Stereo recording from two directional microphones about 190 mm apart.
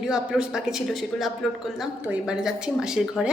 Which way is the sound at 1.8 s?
5° right (ahead or behind).